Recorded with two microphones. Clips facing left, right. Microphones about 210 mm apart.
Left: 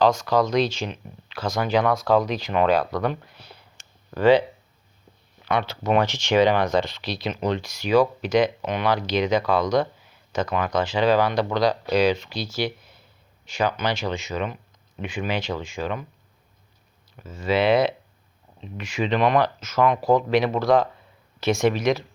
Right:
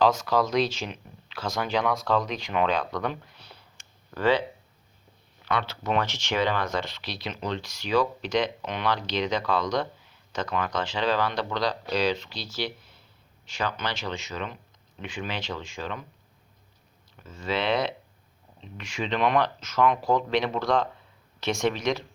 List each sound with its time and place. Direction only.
0.0 s speech: 5° right (ahead or behind)
3.1 s a sound: 10° left (ahead or behind)
4.1 s speech: 15° left (ahead or behind)
5.5 s speech: 15° left (ahead or behind)
17.2 s speech: 5° left (ahead or behind)